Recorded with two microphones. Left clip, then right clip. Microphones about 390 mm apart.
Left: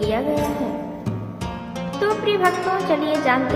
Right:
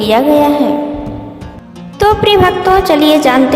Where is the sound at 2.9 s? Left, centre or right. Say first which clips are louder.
Right 11 dB; right.